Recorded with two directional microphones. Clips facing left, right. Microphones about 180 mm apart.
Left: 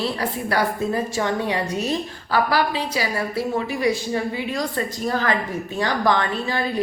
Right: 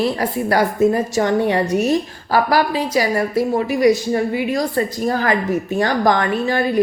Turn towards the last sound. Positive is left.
turn(degrees=-45)  # may be behind; listen again after turning